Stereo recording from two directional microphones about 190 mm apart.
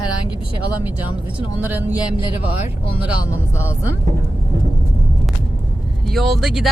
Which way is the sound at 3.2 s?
15° left (ahead or behind).